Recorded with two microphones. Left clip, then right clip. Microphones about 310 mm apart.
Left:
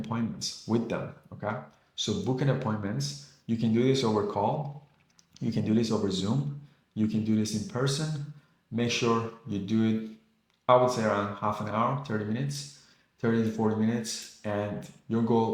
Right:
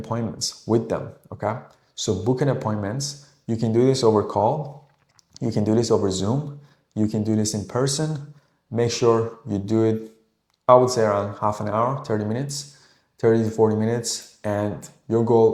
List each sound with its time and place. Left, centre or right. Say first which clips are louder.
0.0 s speech: right 6 dB; right
2.0 s speech: right 8 dB; right